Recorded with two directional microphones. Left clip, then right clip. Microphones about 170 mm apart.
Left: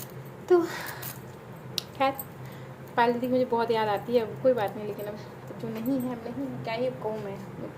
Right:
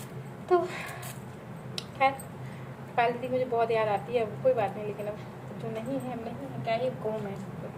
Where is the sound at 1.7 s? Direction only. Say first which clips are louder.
Even; 45° left (ahead or behind).